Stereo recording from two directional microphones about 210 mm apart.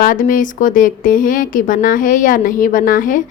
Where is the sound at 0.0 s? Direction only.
40° left (ahead or behind).